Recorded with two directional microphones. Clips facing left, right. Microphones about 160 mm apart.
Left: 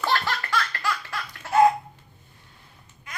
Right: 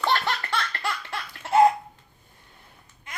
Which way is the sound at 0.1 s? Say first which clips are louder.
Left 1 dB; 25° right (ahead or behind).